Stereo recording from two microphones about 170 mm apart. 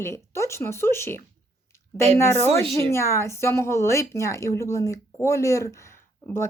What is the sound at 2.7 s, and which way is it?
A woman's voice, 15° left (ahead or behind).